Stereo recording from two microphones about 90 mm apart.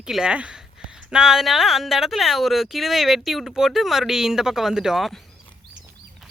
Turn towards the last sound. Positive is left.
turn(degrees=0)  # may be behind; listen again after turning